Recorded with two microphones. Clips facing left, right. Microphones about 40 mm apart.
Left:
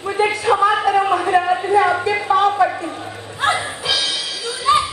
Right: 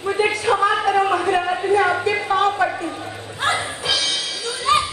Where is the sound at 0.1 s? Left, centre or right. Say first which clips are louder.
Left 2 dB; centre.